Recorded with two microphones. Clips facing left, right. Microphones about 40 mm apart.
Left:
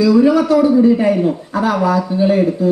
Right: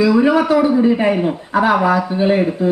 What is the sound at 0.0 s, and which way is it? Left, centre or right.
A man's voice, right.